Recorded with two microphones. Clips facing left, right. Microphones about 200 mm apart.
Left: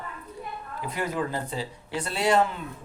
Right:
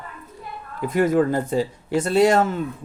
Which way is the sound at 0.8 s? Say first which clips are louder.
Right 12 dB; 50° right (ahead or behind).